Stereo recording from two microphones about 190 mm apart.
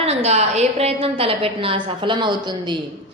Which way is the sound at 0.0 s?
35° right (ahead or behind).